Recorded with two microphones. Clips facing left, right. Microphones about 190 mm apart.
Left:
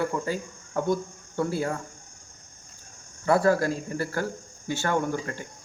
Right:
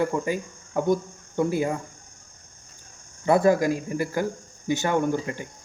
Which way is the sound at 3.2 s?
20° right (ahead or behind).